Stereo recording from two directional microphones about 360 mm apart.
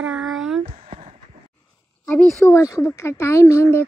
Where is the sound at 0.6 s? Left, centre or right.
Centre.